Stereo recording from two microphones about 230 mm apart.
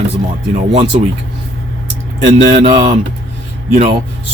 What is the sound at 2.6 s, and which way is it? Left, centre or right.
Speech, right.